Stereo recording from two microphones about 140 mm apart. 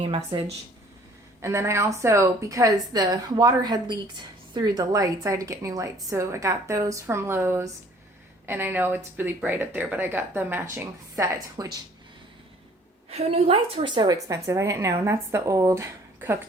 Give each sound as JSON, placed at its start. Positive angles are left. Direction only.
{"t": 1.4, "sound": "a woman's voice", "side_deg": -20}
{"t": 11.5, "sound": "a woman's voice", "side_deg": -30}
{"t": 13.1, "sound": "a woman's voice", "side_deg": -45}